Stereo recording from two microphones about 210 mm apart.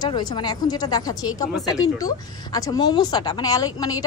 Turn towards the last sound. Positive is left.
turn(degrees=15)  # may be behind; listen again after turning